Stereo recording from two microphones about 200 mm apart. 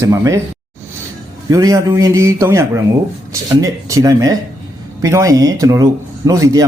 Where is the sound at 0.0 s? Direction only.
15° right (ahead or behind).